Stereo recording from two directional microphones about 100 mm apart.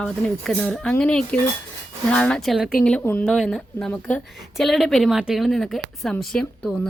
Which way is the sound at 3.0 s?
20° left (ahead or behind).